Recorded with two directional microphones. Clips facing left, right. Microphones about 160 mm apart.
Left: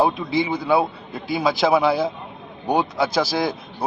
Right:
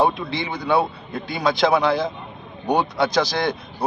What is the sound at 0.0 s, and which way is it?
A man's voice, 5° left (ahead or behind).